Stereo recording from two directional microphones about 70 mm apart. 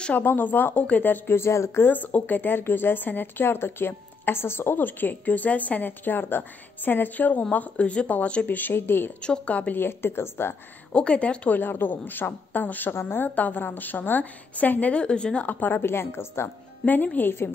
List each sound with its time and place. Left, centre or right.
0.1 s speech: left
9.2 s a woman's voice: centre; by 10.5 s left
10.9 s speech: centre
15.6 s a woman's voice: left
16.8 s speech: left